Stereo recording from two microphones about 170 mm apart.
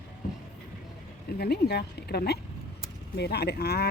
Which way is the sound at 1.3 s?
70° left (ahead or behind).